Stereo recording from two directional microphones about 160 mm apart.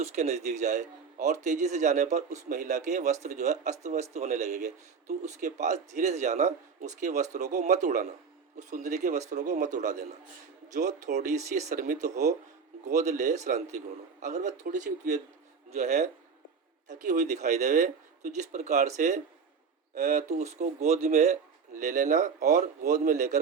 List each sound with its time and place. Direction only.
0.0 s speech: 45° right (ahead or behind)